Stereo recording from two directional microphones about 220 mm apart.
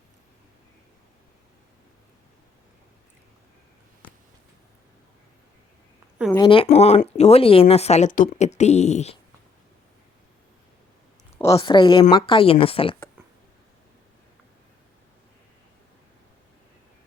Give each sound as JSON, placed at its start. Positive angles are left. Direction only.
{"t": 6.3, "sound": "speech", "side_deg": 20}
{"t": 11.5, "sound": "speech", "side_deg": 20}